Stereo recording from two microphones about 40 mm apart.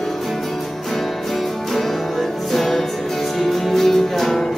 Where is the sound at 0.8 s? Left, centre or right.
Centre.